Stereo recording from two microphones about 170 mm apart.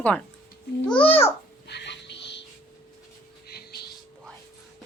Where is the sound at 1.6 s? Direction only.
85° left.